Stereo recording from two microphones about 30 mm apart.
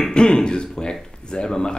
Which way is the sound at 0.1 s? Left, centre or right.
Left.